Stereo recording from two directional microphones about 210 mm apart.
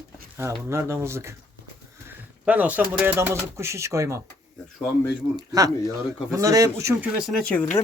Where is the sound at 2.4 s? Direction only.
5° right (ahead or behind).